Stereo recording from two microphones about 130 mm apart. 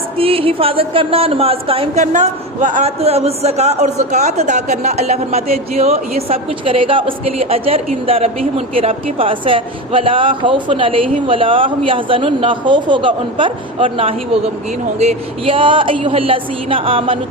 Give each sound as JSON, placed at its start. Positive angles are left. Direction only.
{"t": 0.2, "sound": "a man's voice", "side_deg": -45}
{"t": 2.0, "sound": "a man's voice", "side_deg": -75}
{"t": 2.8, "sound": "a man's voice", "side_deg": -50}